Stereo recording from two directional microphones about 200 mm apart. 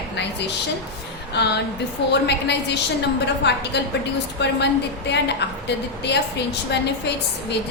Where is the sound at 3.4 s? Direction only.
60° left (ahead or behind).